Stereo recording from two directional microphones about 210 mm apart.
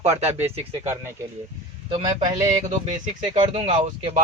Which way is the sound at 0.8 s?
10° right (ahead or behind).